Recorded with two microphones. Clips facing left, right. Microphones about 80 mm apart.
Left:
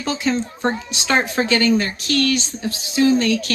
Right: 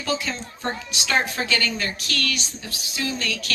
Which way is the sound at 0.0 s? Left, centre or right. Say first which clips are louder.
Left 6 dB; left.